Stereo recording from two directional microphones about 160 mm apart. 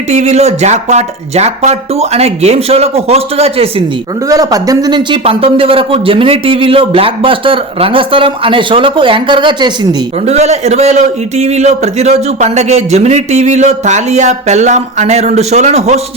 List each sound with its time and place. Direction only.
0.1 s speech: 45° right (ahead or behind)
4.3 s speech: 20° right (ahead or behind)
10.2 s a man's voice: 40° right (ahead or behind)